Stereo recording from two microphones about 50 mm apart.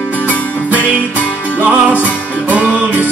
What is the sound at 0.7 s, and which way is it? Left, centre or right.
Music, right.